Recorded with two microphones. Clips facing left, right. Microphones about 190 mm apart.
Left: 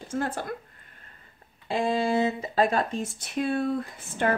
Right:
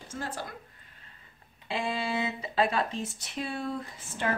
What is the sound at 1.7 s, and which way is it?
Speech, 45° left (ahead or behind).